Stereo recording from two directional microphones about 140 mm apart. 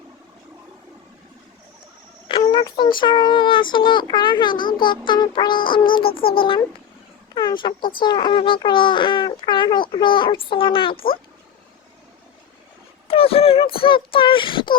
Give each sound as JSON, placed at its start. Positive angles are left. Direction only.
{"t": 2.2, "sound": "a child's voice", "side_deg": 35}
{"t": 13.1, "sound": "a sound", "side_deg": 45}
{"t": 13.7, "sound": "a child's voice", "side_deg": 40}